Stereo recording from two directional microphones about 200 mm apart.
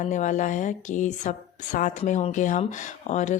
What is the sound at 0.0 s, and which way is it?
Speech, 40° left (ahead or behind).